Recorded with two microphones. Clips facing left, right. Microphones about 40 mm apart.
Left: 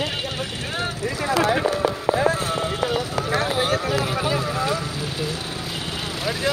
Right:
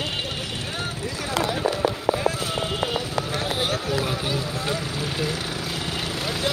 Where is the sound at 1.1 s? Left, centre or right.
Left.